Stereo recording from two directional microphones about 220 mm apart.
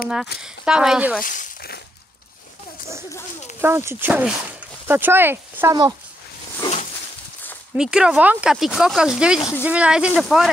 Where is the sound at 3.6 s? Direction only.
10° right (ahead or behind).